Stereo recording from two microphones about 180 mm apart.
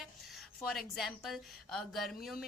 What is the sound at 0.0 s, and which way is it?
A woman's voice, centre (ahead or behind).